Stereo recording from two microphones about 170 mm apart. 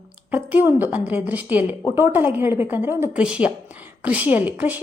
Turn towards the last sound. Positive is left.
turn(degrees=-10)  # may be behind; listen again after turning